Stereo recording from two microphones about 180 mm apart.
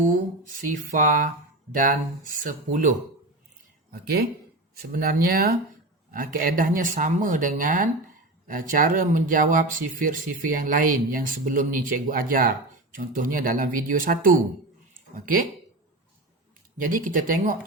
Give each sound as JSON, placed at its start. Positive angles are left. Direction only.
{"t": 0.6, "sound": "speech", "side_deg": -45}
{"t": 2.4, "sound": "speech", "side_deg": -50}
{"t": 4.0, "sound": "speech", "side_deg": -60}
{"t": 16.7, "sound": "speech", "side_deg": -50}